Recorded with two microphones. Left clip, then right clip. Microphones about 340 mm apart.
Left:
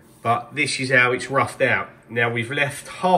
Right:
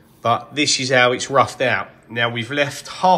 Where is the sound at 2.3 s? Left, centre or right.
Right.